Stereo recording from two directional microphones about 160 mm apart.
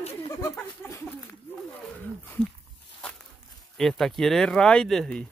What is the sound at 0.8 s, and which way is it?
Speech, 20° left (ahead or behind).